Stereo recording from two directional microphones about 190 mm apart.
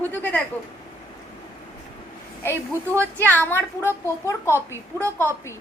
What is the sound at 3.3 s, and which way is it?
A woman's voice, 10° left (ahead or behind).